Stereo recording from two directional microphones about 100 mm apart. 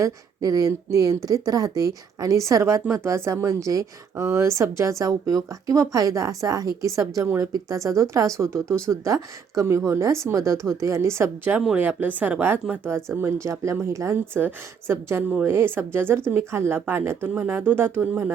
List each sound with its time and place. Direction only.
0.0 s a woman's voice: 35° right (ahead or behind)